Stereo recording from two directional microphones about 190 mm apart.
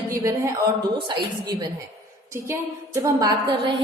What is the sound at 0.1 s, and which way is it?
Speech, 15° right (ahead or behind).